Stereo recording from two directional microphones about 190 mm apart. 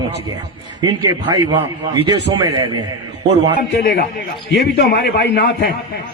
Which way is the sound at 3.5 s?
55° left (ahead or behind).